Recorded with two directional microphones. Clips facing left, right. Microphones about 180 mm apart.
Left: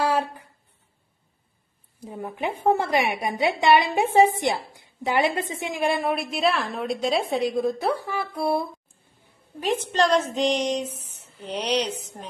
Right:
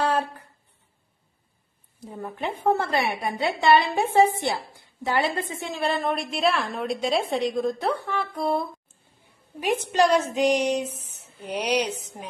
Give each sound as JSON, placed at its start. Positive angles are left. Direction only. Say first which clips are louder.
{"t": 0.0, "sound": "a sound", "louder": "left 1 dB", "side_deg": 10}
{"t": 2.0, "sound": "a woman's voice", "louder": "left 2 dB", "side_deg": 15}
{"t": 9.6, "sound": "a woman's voice", "louder": "right 1 dB", "side_deg": -10}